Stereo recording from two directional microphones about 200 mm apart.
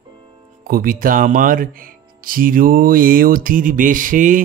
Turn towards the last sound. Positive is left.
turn(degrees=-40)  # may be behind; listen again after turning